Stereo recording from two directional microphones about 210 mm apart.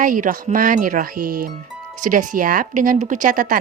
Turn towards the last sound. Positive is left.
turn(degrees=-40)  # may be behind; listen again after turning